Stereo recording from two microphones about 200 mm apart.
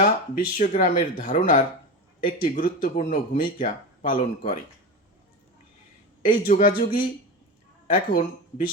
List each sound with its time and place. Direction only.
0.0 s a man's voice: 40° left (ahead or behind)
6.2 s a man's voice: 45° left (ahead or behind)